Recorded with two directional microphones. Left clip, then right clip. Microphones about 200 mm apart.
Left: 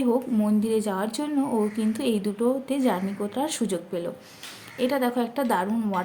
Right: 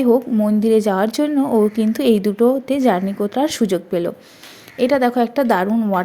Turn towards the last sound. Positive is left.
turn(degrees=-25)  # may be behind; listen again after turning